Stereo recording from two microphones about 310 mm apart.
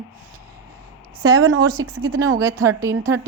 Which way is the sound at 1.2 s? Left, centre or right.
Right.